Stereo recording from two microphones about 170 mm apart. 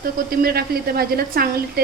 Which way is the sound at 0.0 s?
65° right (ahead or behind).